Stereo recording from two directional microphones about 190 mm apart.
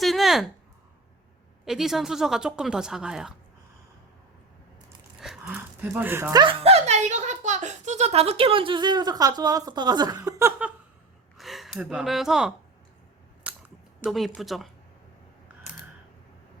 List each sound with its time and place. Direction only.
0.0 s a sound: centre (ahead or behind)
1.6 s speech: centre (ahead or behind)
5.2 s speech: 5° right (ahead or behind)
6.3 s speech: 25° right (ahead or behind)
11.3 s speech: centre (ahead or behind)
14.0 s speech: centre (ahead or behind)